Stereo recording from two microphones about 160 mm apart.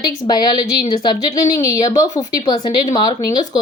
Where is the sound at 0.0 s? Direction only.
25° left (ahead or behind).